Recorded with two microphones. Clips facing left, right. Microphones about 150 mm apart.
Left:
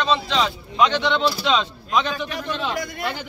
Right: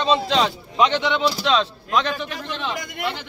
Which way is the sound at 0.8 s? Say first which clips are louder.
Left 1 dB; 20° right (ahead or behind).